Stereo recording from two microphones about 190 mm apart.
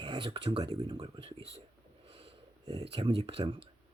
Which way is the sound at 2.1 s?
30° right (ahead or behind).